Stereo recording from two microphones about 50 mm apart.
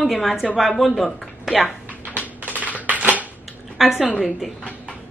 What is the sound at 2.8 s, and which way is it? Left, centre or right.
Crushing, right.